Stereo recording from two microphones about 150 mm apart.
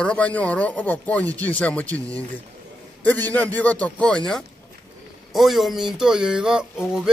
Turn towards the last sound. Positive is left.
turn(degrees=-5)  # may be behind; listen again after turning